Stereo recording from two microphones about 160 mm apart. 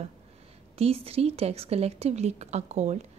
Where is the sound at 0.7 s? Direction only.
40° right (ahead or behind).